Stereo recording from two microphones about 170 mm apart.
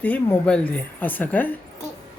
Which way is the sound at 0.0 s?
10° left (ahead or behind).